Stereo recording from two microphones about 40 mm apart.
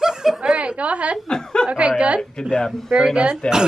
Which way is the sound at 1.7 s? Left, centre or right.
Right.